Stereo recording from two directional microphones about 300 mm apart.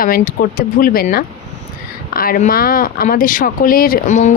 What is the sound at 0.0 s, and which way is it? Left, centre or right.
Speech, left.